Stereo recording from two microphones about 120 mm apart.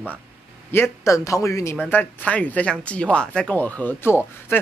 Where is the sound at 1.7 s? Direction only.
10° left (ahead or behind).